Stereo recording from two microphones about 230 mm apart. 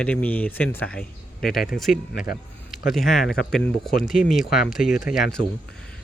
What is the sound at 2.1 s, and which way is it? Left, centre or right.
Speech, left.